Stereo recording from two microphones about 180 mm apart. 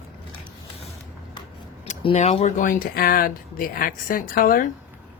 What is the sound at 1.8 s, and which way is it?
Speech, 40° left (ahead or behind).